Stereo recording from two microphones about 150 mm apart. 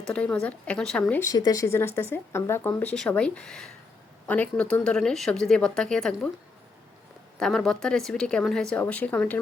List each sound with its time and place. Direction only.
0.1 s speech: 10° left (ahead or behind)
1.5 s speech: 20° left (ahead or behind)
2.9 s speech: 5° left (ahead or behind)
7.3 s speech: 5° left (ahead or behind)